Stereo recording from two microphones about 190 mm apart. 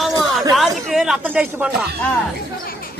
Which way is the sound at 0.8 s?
Centre (ahead or behind).